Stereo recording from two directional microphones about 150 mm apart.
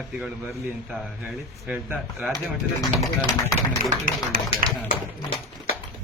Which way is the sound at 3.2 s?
20° left (ahead or behind).